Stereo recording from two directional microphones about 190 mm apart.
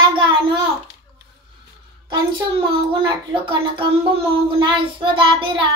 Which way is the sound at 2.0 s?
25° right (ahead or behind).